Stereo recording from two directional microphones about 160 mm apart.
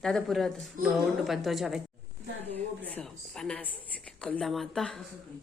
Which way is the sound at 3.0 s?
5° left (ahead or behind).